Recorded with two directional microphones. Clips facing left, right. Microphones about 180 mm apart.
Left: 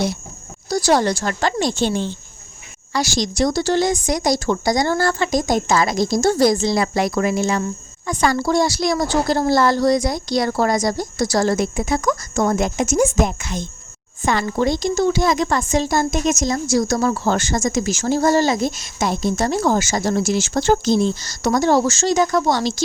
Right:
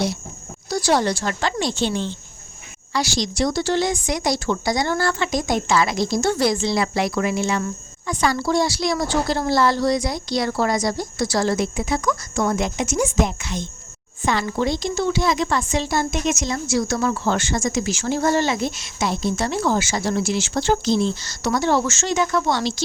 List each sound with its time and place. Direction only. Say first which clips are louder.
0.7 s a woman's voice: left 3 dB; 40° left (ahead or behind)